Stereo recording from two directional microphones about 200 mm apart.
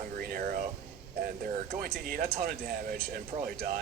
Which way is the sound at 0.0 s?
45° right (ahead or behind).